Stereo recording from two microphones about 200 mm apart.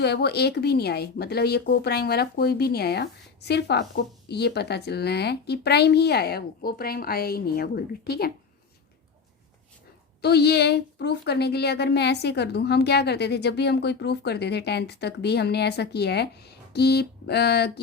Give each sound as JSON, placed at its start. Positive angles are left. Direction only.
{"t": 0.0, "sound": "speech", "side_deg": 55}
{"t": 10.2, "sound": "a woman's voice", "side_deg": 55}